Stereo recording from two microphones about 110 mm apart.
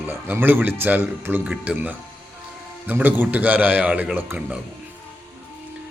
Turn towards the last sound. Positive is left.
turn(degrees=-15)  # may be behind; listen again after turning